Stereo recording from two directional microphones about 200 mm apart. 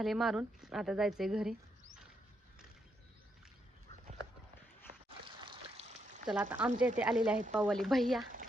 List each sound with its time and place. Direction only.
0.0 s speech: centre (ahead or behind)
5.0 s a sound: 25° right (ahead or behind)
6.2 s speech: 5° right (ahead or behind)